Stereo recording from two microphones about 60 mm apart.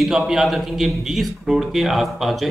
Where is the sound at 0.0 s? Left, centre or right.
Centre.